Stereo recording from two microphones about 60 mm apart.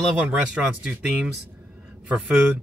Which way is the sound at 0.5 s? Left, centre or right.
Centre.